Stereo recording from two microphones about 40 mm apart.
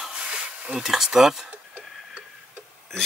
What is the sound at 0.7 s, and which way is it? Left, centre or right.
Speech, centre.